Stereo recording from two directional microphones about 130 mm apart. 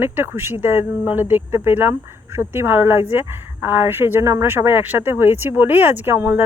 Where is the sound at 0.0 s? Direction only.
15° right (ahead or behind).